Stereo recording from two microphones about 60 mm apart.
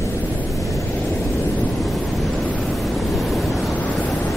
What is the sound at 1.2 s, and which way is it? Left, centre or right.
Waves, left.